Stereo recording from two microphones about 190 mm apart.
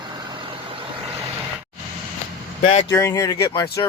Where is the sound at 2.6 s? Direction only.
35° left (ahead or behind).